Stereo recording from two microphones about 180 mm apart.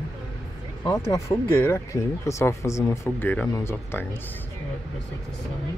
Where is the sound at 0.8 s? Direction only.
25° left (ahead or behind).